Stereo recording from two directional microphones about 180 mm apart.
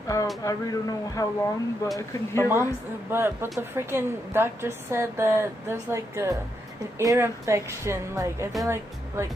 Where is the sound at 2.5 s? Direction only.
10° right (ahead or behind).